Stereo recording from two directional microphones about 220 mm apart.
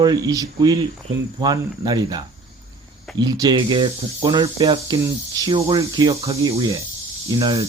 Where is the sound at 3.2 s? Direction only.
20° right (ahead or behind).